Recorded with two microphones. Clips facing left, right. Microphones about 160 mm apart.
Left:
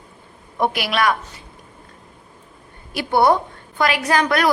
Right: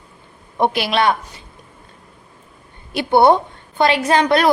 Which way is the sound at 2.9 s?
25° right (ahead or behind).